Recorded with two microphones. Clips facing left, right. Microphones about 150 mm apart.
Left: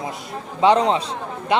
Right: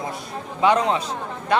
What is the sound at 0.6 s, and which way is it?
Speech, 30° left (ahead or behind).